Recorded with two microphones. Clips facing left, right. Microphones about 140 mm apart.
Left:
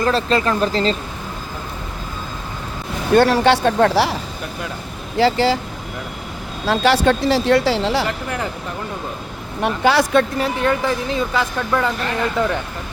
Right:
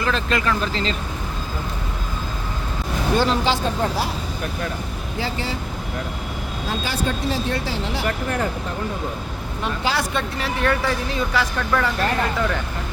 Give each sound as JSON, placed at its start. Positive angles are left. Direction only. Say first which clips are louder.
{"t": 0.0, "sound": "speech", "louder": "left 5 dB", "side_deg": 35}
{"t": 3.2, "sound": "speech", "louder": "left 8 dB", "side_deg": 65}
{"t": 5.1, "sound": "speech", "louder": "left 12 dB", "side_deg": 90}
{"t": 6.7, "sound": "speech", "louder": "left 10 dB", "side_deg": 80}
{"t": 9.6, "sound": "speech", "louder": "left 8 dB", "side_deg": 60}
{"t": 10.6, "sound": "speech", "louder": "even", "side_deg": 25}